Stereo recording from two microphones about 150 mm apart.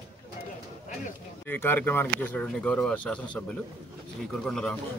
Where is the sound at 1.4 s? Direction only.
15° left (ahead or behind).